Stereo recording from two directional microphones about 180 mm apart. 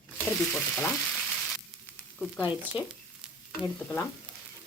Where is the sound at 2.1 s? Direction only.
5° left (ahead or behind).